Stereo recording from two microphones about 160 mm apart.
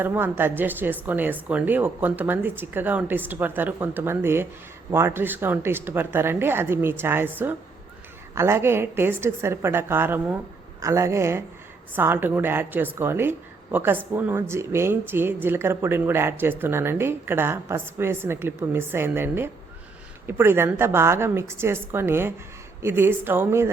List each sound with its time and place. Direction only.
0.0 s speech: 15° right (ahead or behind)
8.4 s speech: 15° right (ahead or behind)